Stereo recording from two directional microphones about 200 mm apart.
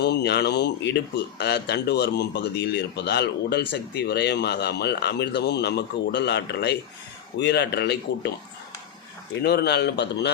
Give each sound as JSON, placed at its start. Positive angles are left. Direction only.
{"t": 0.0, "sound": "speech", "side_deg": 55}
{"t": 9.4, "sound": "speech", "side_deg": 55}